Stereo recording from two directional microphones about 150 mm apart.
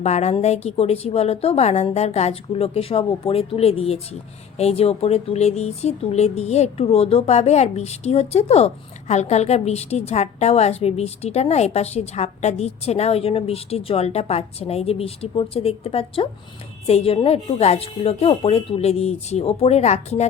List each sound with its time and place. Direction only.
0.0 s speech: 45° left (ahead or behind)